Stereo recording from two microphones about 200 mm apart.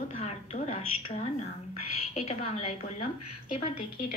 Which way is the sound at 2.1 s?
30° left (ahead or behind).